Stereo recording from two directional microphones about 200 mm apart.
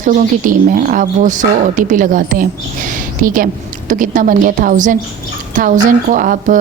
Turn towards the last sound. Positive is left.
turn(degrees=-40)  # may be behind; listen again after turning